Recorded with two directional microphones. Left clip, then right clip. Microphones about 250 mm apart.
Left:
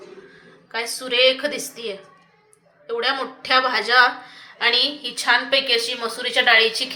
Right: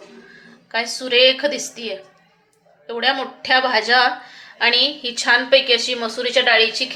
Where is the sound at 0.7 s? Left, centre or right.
Right.